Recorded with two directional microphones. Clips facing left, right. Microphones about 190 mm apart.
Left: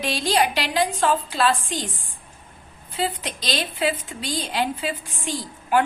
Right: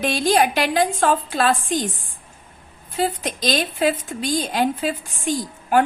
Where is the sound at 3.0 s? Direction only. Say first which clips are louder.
Right 4 dB; 45° right (ahead or behind).